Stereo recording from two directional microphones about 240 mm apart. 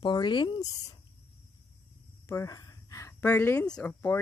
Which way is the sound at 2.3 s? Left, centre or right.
Centre.